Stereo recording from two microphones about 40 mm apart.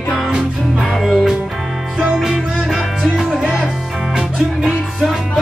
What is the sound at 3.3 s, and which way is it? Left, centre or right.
Music, centre.